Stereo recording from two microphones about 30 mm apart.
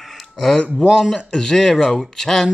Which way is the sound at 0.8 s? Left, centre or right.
Centre.